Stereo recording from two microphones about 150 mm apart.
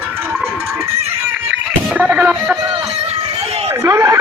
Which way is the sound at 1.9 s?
10° right (ahead or behind).